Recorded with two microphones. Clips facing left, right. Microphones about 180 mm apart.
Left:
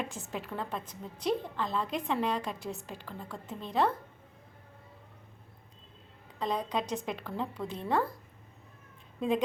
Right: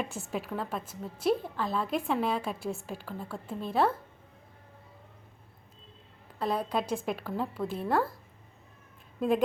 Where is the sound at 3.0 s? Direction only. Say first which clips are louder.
Right 3 dB; 5° right (ahead or behind).